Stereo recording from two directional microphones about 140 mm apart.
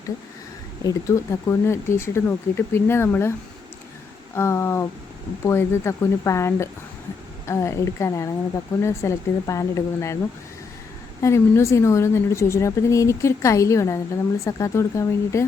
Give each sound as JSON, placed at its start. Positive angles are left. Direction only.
{"t": 0.9, "sound": "speech", "side_deg": 20}
{"t": 4.4, "sound": "a woman's voice", "side_deg": 20}
{"t": 11.2, "sound": "a woman's voice", "side_deg": 20}